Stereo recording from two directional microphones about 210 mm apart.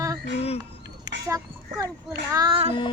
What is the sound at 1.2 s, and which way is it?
A child's voice, 15° right (ahead or behind).